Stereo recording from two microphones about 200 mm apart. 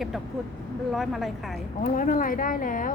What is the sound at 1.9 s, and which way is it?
Speech, 45° left (ahead or behind).